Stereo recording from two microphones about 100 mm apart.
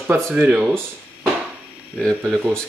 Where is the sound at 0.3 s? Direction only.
10° right (ahead or behind).